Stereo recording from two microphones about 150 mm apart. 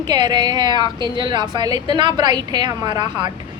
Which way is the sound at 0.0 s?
30° right (ahead or behind).